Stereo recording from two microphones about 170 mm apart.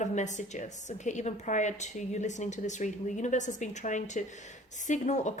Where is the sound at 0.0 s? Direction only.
45° left (ahead or behind).